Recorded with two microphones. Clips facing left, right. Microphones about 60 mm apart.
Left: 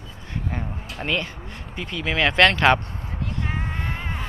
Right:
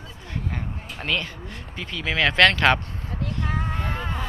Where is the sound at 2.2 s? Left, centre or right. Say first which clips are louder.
Even; left.